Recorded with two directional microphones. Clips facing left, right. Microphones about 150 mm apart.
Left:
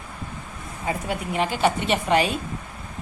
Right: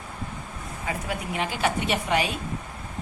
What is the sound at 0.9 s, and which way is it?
A woman's voice, 25° left (ahead or behind).